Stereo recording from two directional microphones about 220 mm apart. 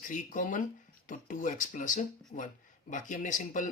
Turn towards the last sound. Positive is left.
turn(degrees=35)  # may be behind; listen again after turning